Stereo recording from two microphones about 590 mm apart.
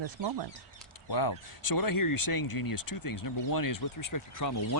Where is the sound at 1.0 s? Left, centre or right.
Left.